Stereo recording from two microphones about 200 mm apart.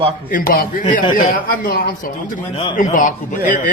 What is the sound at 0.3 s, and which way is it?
A man's voice, 45° left (ahead or behind).